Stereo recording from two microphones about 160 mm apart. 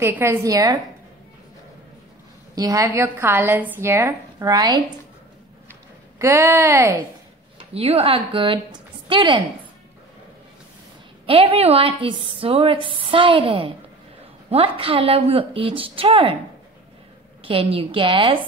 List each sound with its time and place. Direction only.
0.0 s a woman's voice: 15° right (ahead or behind)
2.5 s a woman's voice: 20° right (ahead or behind)
6.1 s a woman's voice: 15° right (ahead or behind)
7.5 s a woman's voice: 40° right (ahead or behind)
11.2 s a woman's voice: 35° right (ahead or behind)
17.4 s a woman's voice: 35° right (ahead or behind)